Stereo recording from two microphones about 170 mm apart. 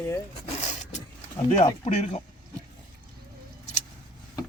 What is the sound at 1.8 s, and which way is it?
Speech, 45° left (ahead or behind).